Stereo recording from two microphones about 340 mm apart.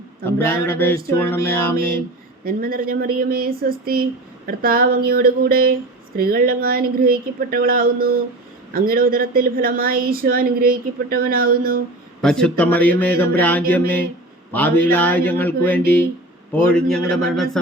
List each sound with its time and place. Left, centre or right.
0.3 s a sound: centre
2.4 s a woman's voice: right
12.2 s a man's voice: centre